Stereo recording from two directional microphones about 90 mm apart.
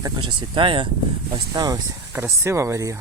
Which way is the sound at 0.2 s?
65° right (ahead or behind).